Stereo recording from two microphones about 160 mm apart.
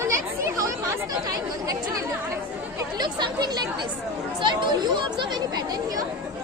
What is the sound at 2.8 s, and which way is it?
Chatter, 25° right (ahead or behind).